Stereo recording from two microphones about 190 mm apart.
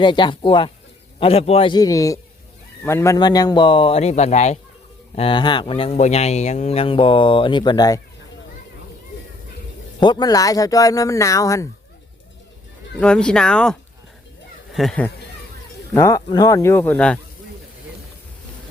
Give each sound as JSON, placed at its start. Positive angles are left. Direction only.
{"t": 0.0, "sound": "speech", "side_deg": 25}
{"t": 10.0, "sound": "speech", "side_deg": 20}
{"t": 13.0, "sound": "speech", "side_deg": 5}
{"t": 16.0, "sound": "speech", "side_deg": 15}